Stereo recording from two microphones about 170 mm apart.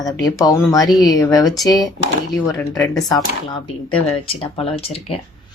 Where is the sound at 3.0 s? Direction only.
25° left (ahead or behind).